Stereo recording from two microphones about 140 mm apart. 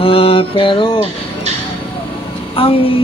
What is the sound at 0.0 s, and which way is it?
Mantra, 40° left (ahead or behind).